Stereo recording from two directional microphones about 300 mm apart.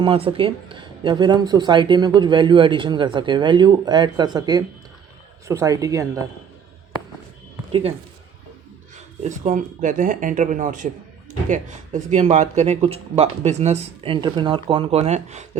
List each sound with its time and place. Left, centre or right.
0.0 s speech: centre
7.7 s speech: centre
9.2 s speech: right